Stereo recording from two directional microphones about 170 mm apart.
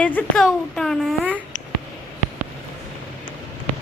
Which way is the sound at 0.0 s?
10° left (ahead or behind).